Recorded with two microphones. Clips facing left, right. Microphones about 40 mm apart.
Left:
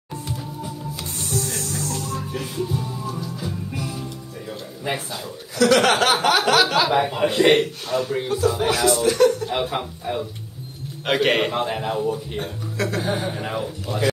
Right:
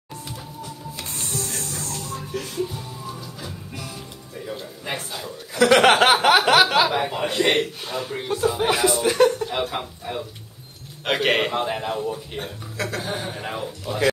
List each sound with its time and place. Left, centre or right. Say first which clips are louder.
2.3 s music: even; centre
4.5 s a sound: left 3 dB; centre
5.6 s speech: right 2 dB; right
6.9 s speech: left 4 dB; centre
8.4 s speech: right 1 dB; centre
9.5 s speech: left 2 dB; centre
13.9 s speech: right 1 dB; centre